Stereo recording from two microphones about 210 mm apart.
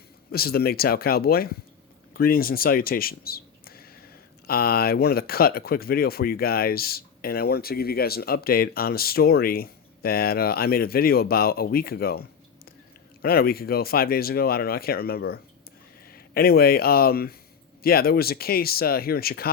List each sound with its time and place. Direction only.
0.3 s speech: 45° left (ahead or behind)
13.2 s speech: 45° left (ahead or behind)